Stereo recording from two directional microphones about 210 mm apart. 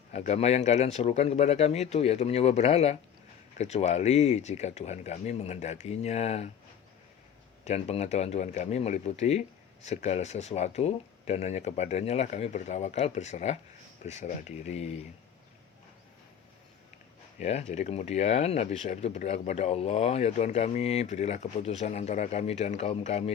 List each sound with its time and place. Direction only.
0.1 s speech: 30° left (ahead or behind)
7.6 s speech: 30° left (ahead or behind)
17.4 s speech: 30° left (ahead or behind)